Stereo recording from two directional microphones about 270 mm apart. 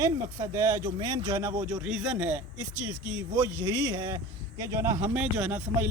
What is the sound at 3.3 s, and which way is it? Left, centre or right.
Speech, centre.